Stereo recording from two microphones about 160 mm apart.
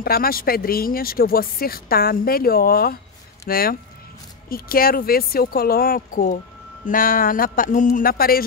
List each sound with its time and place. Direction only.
0.0 s speech: 70° left (ahead or behind)